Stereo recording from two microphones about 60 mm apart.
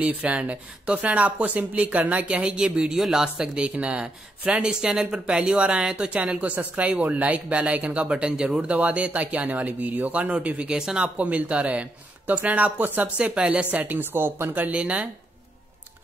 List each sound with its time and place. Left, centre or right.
0.0 s speech: right